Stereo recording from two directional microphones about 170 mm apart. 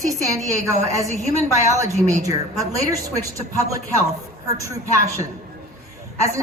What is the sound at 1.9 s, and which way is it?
Speech, 45° right (ahead or behind).